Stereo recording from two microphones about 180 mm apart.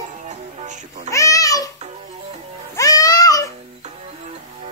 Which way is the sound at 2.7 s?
20° left (ahead or behind).